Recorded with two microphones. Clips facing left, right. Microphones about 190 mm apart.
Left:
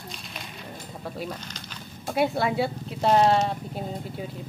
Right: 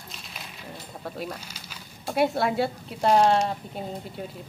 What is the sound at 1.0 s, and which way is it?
Speech, centre (ahead or behind).